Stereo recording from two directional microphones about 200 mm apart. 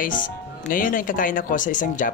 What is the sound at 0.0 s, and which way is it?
Speech, 45° left (ahead or behind).